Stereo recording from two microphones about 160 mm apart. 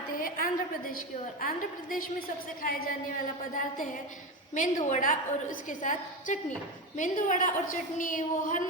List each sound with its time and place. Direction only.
0.2 s a woman's voice: 60° left (ahead or behind)
4.5 s a woman's voice: 50° left (ahead or behind)